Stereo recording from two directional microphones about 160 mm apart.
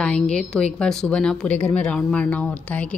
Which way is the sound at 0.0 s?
5° left (ahead or behind).